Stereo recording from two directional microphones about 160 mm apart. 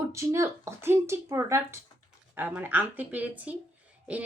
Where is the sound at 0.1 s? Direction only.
20° right (ahead or behind).